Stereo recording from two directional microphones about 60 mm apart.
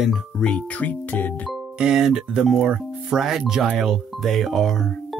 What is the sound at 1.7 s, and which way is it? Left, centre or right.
Speech, centre.